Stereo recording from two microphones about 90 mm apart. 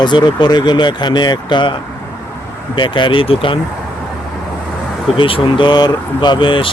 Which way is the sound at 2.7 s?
60° left (ahead or behind).